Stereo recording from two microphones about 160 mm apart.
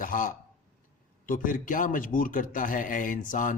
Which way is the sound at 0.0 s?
60° left (ahead or behind).